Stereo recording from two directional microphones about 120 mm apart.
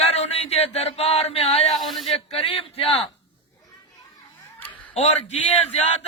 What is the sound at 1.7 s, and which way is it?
Speech, centre (ahead or behind).